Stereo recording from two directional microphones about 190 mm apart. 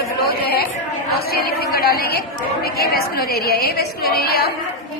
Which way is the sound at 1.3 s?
55° left (ahead or behind).